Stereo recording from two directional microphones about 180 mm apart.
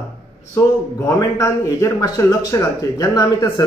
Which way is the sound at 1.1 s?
15° left (ahead or behind).